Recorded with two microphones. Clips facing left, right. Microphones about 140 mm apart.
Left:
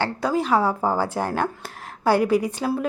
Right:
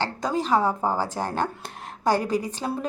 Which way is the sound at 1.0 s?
10° left (ahead or behind).